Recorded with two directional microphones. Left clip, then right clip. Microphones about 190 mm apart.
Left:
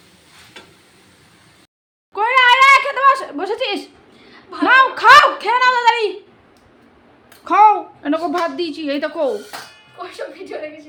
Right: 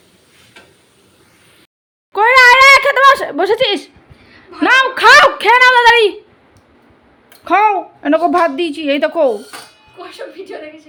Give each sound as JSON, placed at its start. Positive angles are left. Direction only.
{"t": 2.1, "sound": "a sound", "side_deg": -35}
{"t": 5.0, "sound": "a woman's voice", "side_deg": -30}
{"t": 7.4, "sound": "a woman's voice", "side_deg": -15}